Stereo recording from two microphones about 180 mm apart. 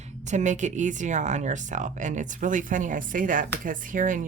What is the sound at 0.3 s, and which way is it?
Speech, 40° right (ahead or behind).